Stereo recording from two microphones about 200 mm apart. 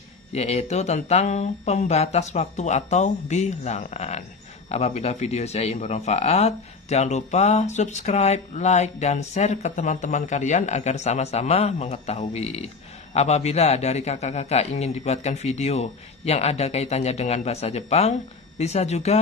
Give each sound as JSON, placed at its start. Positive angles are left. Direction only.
{"t": 0.3, "sound": "speech", "side_deg": 30}